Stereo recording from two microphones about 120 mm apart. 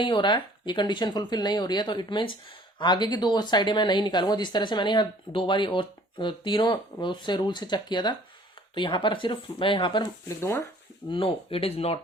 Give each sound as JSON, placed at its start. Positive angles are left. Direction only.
{"t": 0.0, "sound": "speech", "side_deg": 40}
{"t": 10.2, "sound": "speech", "side_deg": 25}
{"t": 11.1, "sound": "speech", "side_deg": 50}